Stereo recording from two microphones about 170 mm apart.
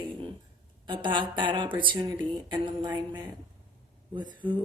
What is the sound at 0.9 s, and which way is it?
Speech, 30° right (ahead or behind).